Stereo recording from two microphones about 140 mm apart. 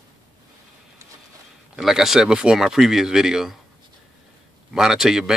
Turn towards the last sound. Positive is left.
turn(degrees=-5)  # may be behind; listen again after turning